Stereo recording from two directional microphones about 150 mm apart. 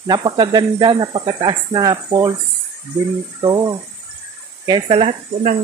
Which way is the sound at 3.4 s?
30° right (ahead or behind).